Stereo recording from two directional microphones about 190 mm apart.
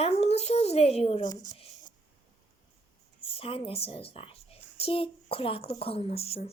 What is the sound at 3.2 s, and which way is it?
A woman's voice, 30° left (ahead or behind).